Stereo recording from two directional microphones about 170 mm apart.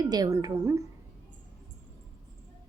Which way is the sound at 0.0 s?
25° right (ahead or behind).